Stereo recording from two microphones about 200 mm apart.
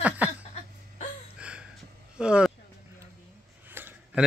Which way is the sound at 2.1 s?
5° right (ahead or behind).